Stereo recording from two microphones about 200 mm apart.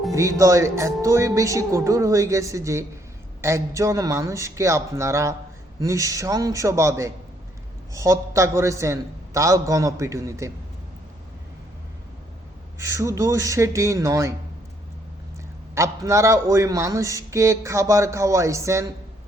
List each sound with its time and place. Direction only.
0.1 s a man's voice: 15° right (ahead or behind)
12.8 s a man's voice: 15° right (ahead or behind)
15.7 s a man's voice: 15° right (ahead or behind)